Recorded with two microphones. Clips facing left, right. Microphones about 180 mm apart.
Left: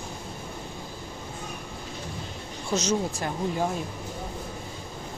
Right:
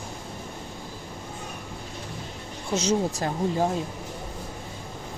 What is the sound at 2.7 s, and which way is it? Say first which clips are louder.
Speech: right 2 dB; 30° right (ahead or behind).